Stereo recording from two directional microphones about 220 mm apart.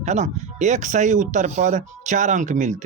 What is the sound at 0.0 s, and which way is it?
Speech, 30° right (ahead or behind).